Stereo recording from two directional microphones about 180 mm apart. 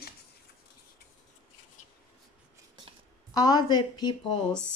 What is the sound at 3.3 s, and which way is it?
Speech, 20° left (ahead or behind).